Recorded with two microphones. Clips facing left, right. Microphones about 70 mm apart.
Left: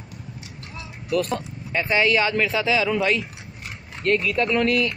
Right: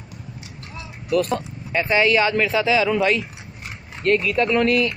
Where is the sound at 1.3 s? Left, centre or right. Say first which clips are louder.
Right 3 dB; right.